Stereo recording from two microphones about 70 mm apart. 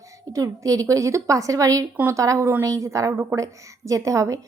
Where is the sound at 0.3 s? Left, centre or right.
Right.